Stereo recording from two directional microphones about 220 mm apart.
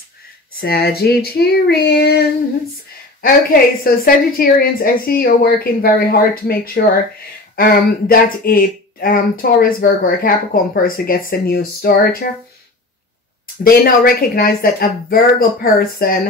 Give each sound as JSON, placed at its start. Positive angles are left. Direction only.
{"t": 0.6, "sound": "speech", "side_deg": 45}
{"t": 3.8, "sound": "speech", "side_deg": 40}
{"t": 13.7, "sound": "speech", "side_deg": 40}